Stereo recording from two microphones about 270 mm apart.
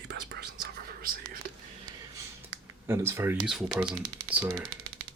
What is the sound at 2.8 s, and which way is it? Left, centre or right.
Speech, centre.